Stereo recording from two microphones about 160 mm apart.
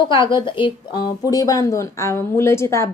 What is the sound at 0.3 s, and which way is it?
A woman's voice, 30° left (ahead or behind).